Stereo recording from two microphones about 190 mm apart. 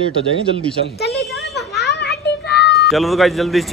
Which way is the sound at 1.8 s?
60° left (ahead or behind).